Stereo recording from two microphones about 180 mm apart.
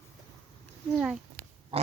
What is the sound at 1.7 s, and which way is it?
Pig, 30° right (ahead or behind).